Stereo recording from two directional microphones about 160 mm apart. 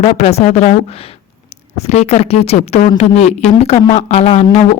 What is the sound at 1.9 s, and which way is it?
A woman's voice, 40° left (ahead or behind).